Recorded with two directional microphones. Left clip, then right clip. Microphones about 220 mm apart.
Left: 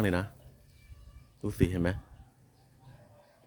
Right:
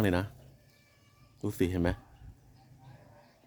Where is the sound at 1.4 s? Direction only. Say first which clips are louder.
Even; 5° right (ahead or behind).